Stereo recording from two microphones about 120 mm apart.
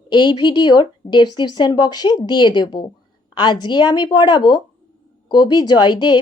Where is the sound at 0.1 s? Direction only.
40° left (ahead or behind).